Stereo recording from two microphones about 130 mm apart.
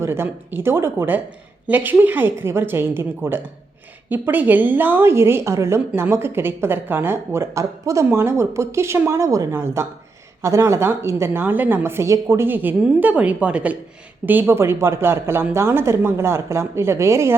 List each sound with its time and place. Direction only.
0.0 s a woman's voice: 20° right (ahead or behind)